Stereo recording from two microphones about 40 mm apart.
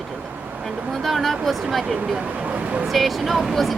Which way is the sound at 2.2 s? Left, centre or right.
Right.